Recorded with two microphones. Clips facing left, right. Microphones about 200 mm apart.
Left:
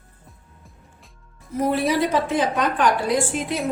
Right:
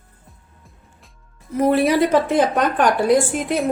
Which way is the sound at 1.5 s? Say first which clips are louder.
Right 5 dB; 60° right (ahead or behind).